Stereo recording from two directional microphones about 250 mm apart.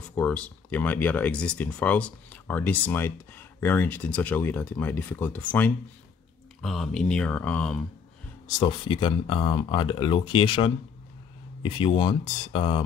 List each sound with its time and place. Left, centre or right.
0.1 s speech: centre
8.5 s speech: centre